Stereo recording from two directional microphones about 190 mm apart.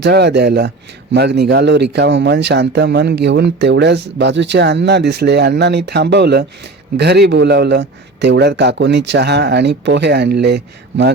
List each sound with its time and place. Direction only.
0.0 s speech: 60° right (ahead or behind)